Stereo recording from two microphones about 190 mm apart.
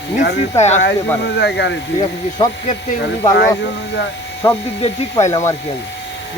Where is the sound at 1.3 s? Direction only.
65° left (ahead or behind).